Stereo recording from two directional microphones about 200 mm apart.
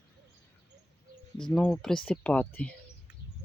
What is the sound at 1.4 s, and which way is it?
Speech, centre (ahead or behind).